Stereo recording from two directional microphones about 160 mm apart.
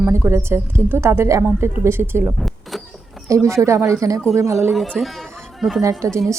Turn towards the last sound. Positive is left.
turn(degrees=-20)  # may be behind; listen again after turning